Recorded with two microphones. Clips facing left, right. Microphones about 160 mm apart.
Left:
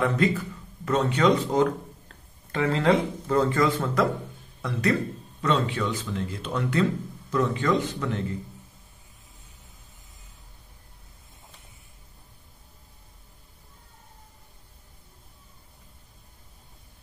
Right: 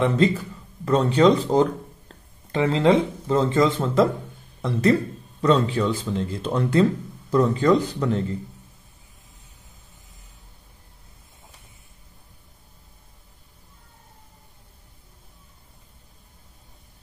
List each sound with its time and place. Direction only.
0.0 s speech: 25° right (ahead or behind)